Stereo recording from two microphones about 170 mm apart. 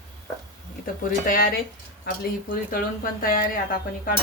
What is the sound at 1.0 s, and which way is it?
Speech, 55° left (ahead or behind).